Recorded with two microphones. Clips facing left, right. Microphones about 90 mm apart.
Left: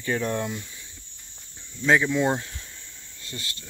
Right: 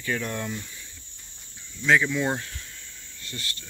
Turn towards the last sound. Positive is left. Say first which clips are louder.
# even
turn(degrees=25)  # may be behind; listen again after turning